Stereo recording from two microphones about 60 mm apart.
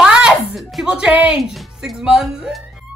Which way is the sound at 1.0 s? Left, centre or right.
Right.